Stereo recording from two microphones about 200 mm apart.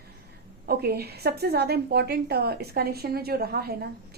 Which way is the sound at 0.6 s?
50° right (ahead or behind).